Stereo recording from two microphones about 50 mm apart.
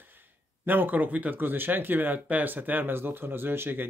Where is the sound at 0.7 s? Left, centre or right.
Right.